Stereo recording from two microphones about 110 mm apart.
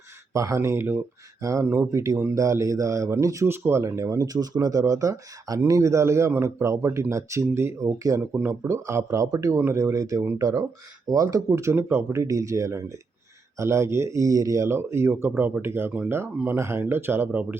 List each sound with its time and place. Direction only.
0.3 s speech: 30° right (ahead or behind)